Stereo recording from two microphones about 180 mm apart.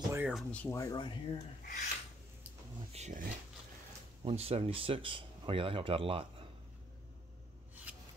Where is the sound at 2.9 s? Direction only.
40° right (ahead or behind).